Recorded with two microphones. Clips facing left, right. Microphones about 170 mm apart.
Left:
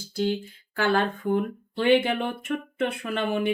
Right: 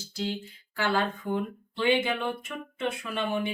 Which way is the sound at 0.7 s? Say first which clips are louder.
Left 4 dB; 55° left (ahead or behind).